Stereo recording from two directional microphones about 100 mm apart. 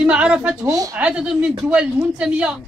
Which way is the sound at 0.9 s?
10° right (ahead or behind).